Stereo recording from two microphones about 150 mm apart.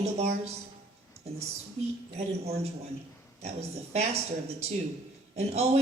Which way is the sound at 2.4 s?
45° right (ahead or behind).